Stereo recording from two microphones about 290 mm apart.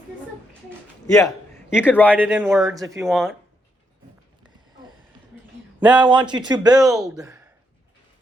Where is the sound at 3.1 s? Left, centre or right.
Centre.